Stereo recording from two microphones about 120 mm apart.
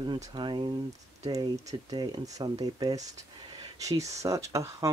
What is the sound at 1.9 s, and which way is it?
Speech, 35° right (ahead or behind).